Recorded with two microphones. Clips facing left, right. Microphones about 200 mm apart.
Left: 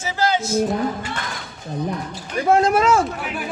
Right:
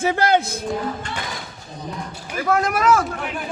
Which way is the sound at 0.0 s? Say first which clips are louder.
Right 3 dB; 55° right (ahead or behind).